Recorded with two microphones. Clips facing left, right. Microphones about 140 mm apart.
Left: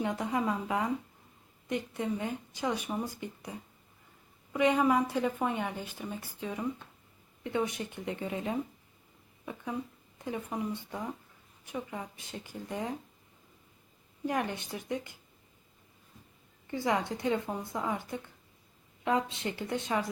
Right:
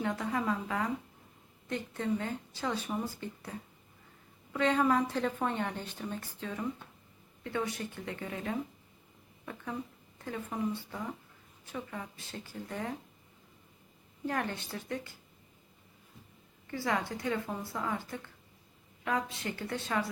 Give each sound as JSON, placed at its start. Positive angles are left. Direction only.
{"t": 0.0, "sound": "a woman's voice", "side_deg": 15}
{"t": 10.2, "sound": "a woman's voice", "side_deg": 15}
{"t": 14.3, "sound": "a woman's voice", "side_deg": 15}
{"t": 16.6, "sound": "speech", "side_deg": 20}